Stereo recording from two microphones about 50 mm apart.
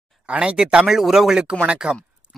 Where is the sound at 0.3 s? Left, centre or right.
Right.